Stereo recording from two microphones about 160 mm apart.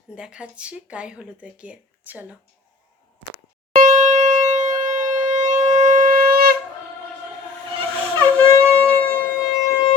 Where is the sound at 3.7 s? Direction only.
55° right (ahead or behind); by 6.5 s 70° right (ahead or behind).